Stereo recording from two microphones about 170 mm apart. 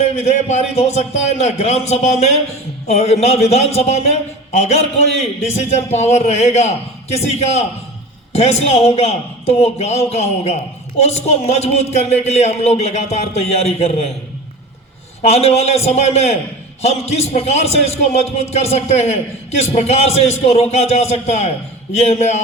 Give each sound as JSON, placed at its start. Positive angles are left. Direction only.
{"t": 0.0, "sound": "a man's voice", "side_deg": 40}
{"t": 15.3, "sound": "a man's voice", "side_deg": 40}